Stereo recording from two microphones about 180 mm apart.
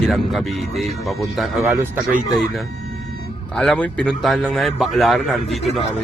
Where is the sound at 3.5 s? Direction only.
Centre (ahead or behind).